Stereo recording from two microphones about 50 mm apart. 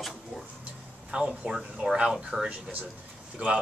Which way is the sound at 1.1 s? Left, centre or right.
Centre.